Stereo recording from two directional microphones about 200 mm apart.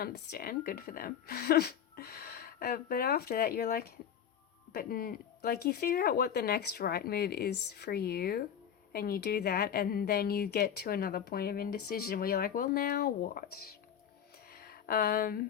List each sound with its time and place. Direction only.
0.0 s a woman's voice: 50° left (ahead or behind)